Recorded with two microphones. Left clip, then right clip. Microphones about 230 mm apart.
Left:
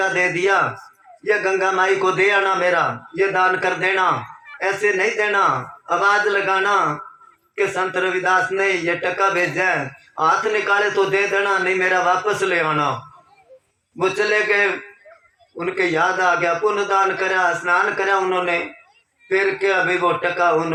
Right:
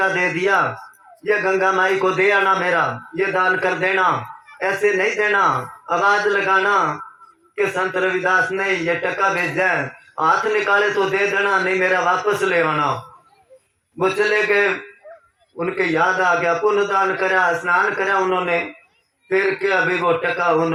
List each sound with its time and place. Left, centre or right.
0.0 s a man's voice: left
14.0 s a man's voice: left